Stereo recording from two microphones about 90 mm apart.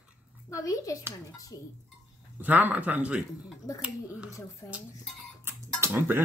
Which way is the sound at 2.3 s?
20° right (ahead or behind).